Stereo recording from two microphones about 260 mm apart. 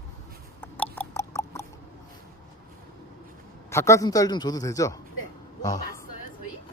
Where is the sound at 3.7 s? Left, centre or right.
Centre.